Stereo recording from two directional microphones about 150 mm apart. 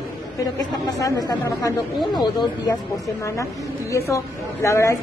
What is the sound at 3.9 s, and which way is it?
A woman's voice, 20° left (ahead or behind).